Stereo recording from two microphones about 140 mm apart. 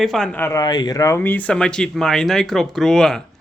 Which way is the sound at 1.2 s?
10° left (ahead or behind).